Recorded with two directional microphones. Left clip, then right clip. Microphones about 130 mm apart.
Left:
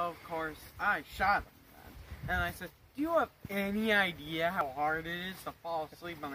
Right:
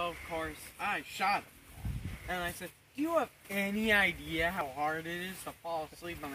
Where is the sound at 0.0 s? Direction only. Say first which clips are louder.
Left 1 dB; centre (ahead or behind).